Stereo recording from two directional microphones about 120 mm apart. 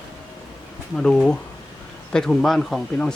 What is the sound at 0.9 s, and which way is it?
Speech, 5° left (ahead or behind).